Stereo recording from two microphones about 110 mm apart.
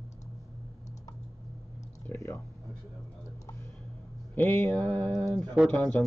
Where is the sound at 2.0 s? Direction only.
25° left (ahead or behind).